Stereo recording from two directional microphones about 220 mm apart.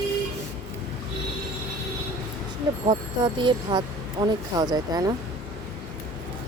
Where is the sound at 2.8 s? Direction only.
20° right (ahead or behind).